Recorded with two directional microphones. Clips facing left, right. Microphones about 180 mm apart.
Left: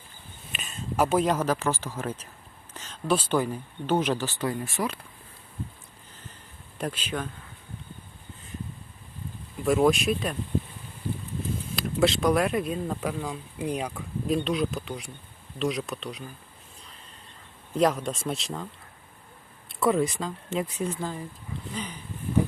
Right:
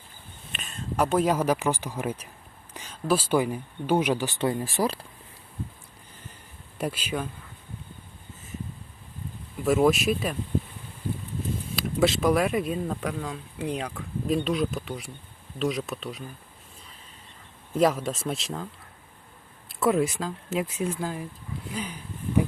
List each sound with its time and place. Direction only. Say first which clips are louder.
0.5 s a sound: even; 5° left (ahead or behind)
1.3 s speech: right 2 dB; 10° right (ahead or behind)
4.4 s speech: right 3 dB; 25° right (ahead or behind)
6.7 s speech: right 2 dB; 10° right (ahead or behind)
9.6 s speech: right 1 dB; centre (ahead or behind)
11.8 s speech: even; centre (ahead or behind)
14.3 s speech: right 1 dB; centre (ahead or behind)
17.7 s speech: right 1 dB; 5° right (ahead or behind)
19.6 s speech: right 1 dB; centre (ahead or behind)